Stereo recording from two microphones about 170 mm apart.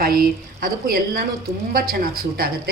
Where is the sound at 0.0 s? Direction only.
60° right (ahead or behind).